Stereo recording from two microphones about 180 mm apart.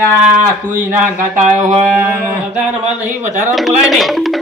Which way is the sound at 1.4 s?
45° right (ahead or behind).